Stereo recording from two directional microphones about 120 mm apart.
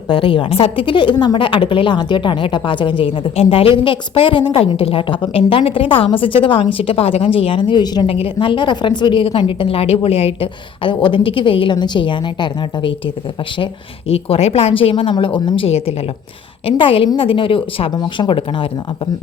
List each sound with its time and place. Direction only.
0.1 s a woman's voice: 45° left (ahead or behind)
8.0 s a woman's voice: 50° left (ahead or behind)
14.1 s a woman's voice: 55° left (ahead or behind)